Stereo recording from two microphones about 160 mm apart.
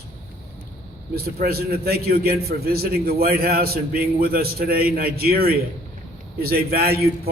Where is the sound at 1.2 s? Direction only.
75° right (ahead or behind).